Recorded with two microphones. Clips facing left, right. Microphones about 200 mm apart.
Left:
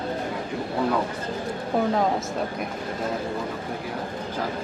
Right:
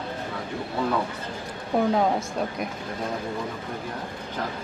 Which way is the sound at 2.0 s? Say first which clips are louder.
Even; centre (ahead or behind).